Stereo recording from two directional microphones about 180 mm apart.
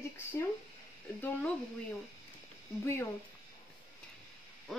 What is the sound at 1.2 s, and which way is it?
Speech, 10° left (ahead or behind).